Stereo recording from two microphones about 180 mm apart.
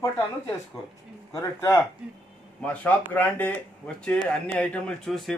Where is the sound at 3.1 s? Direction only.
10° left (ahead or behind).